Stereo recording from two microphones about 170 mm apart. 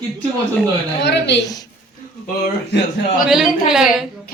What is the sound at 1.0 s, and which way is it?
Speech, 90° left.